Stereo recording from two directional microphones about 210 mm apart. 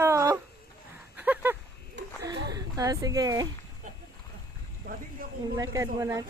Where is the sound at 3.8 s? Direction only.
40° right (ahead or behind).